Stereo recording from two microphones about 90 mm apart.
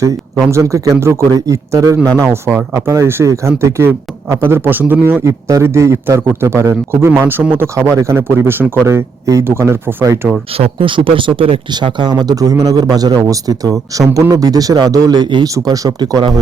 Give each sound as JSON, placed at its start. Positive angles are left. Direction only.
{"t": 0.4, "sound": "a man's voice", "side_deg": -35}
{"t": 2.2, "sound": "speech", "side_deg": -25}
{"t": 2.7, "sound": "a man's voice", "side_deg": -35}
{"t": 5.2, "sound": "a man's voice", "side_deg": -35}
{"t": 10.6, "sound": "speech", "side_deg": -75}
{"t": 11.7, "sound": "a man's voice", "side_deg": -60}
{"t": 15.5, "sound": "a man's voice", "side_deg": -40}